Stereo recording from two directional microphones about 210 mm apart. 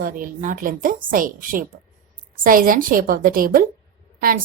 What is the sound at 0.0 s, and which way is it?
A woman's voice, 40° right (ahead or behind).